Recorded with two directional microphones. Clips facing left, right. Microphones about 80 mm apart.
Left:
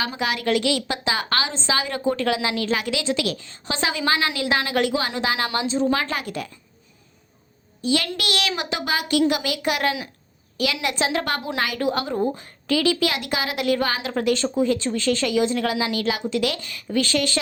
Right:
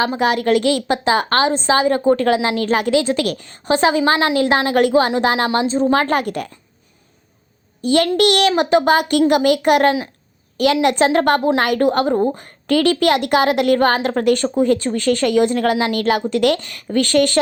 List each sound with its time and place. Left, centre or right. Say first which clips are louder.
0.0 s a woman's voice: right 8 dB; right
7.9 s a woman's voice: right 9 dB; right